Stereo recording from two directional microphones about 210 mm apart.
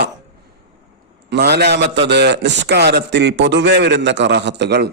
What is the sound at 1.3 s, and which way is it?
A man's voice, 50° right (ahead or behind).